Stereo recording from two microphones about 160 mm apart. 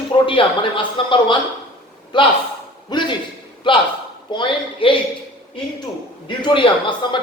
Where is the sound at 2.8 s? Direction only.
30° left (ahead or behind).